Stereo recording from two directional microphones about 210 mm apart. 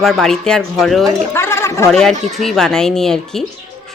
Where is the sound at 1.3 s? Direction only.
10° left (ahead or behind).